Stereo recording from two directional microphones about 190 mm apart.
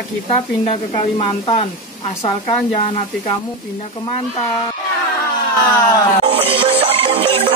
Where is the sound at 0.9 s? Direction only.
25° left (ahead or behind).